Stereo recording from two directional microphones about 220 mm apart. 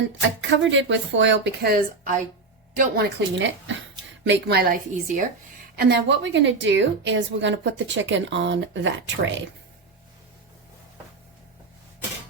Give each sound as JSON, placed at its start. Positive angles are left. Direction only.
{"t": 0.7, "sound": "a woman's voice", "side_deg": -55}